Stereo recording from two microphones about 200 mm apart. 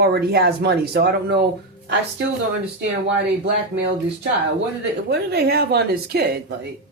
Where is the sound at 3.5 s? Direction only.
60° right (ahead or behind).